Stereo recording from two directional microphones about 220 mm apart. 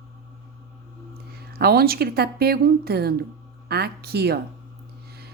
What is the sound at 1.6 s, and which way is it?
A woman's voice, 45° right (ahead or behind).